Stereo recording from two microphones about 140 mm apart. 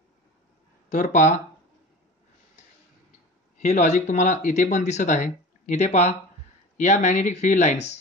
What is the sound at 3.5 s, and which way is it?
Speech, 60° left (ahead or behind).